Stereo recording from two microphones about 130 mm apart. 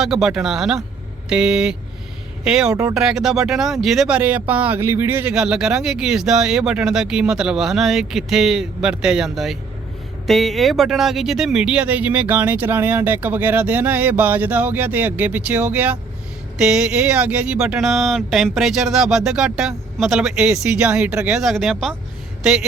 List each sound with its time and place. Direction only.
0.0 s speech: 5° right (ahead or behind)
5.3 s speech: 5° right (ahead or behind)